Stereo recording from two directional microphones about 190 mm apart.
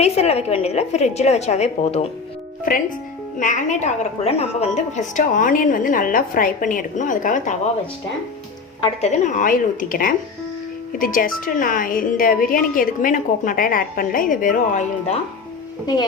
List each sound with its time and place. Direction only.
0.0 s a woman's voice: 35° left (ahead or behind)
3.3 s speech: 40° left (ahead or behind)
8.8 s a woman's voice: 35° left (ahead or behind)